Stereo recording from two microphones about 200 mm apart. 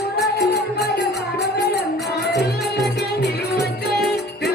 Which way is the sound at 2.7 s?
55° left (ahead or behind).